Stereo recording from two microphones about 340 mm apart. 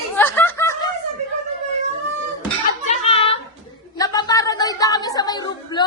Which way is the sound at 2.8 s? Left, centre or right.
Centre.